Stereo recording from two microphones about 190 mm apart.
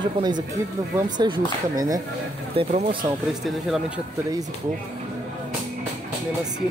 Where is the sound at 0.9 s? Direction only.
25° right (ahead or behind).